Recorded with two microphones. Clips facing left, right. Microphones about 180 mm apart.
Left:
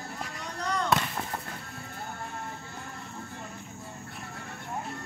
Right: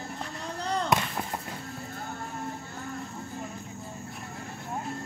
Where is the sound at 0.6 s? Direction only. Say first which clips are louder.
Right 1 dB; 30° right (ahead or behind).